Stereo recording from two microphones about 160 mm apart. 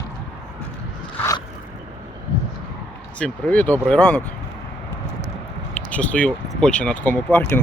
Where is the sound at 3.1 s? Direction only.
10° left (ahead or behind).